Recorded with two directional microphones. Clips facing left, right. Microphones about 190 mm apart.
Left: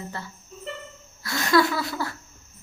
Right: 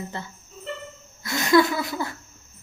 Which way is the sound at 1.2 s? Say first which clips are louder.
Right 2 dB; 20° right (ahead or behind).